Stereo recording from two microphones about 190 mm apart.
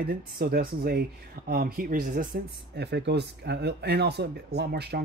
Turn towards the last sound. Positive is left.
turn(degrees=-60)  # may be behind; listen again after turning